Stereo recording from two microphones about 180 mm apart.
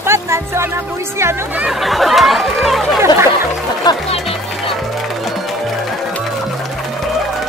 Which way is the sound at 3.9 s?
20° left (ahead or behind).